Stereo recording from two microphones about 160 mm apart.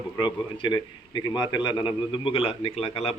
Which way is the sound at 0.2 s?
30° left (ahead or behind).